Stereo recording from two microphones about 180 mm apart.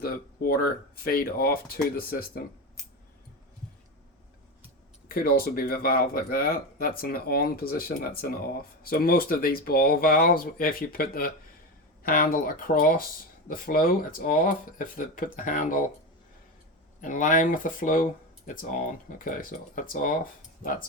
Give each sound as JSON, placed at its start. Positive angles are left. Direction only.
{"t": 0.0, "sound": "speech", "side_deg": 55}
{"t": 5.0, "sound": "speech", "side_deg": 55}
{"t": 17.0, "sound": "speech", "side_deg": 45}